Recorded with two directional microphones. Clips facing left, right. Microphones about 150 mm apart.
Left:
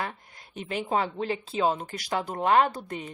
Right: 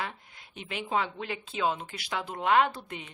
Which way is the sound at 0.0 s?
45° left (ahead or behind).